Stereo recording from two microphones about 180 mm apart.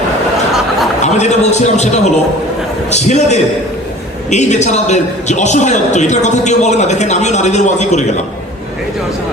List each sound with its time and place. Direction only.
1.0 s a man's voice: 40° left (ahead or behind)